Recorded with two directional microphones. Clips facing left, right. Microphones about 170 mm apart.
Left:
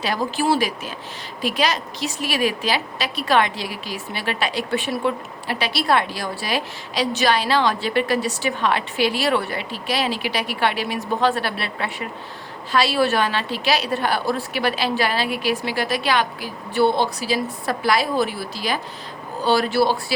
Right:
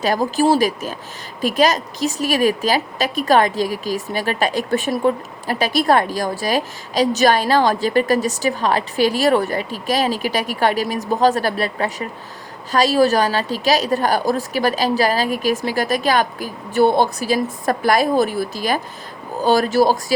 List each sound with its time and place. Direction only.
0.0 s a woman's voice: 45° right (ahead or behind)